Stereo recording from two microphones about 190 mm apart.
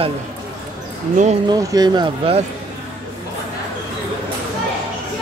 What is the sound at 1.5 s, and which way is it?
Speech, 20° right (ahead or behind).